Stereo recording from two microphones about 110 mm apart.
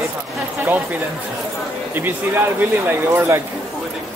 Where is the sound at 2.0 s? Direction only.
20° right (ahead or behind).